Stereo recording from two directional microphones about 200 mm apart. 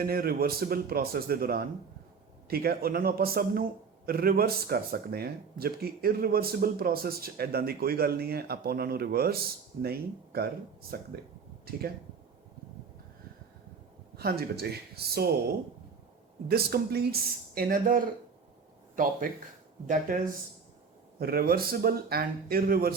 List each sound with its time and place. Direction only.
0.0 s a man's voice: 50° right (ahead or behind)
14.2 s a man's voice: 50° right (ahead or behind)
16.5 s a man's voice: 50° right (ahead or behind)
19.9 s a man's voice: 40° right (ahead or behind)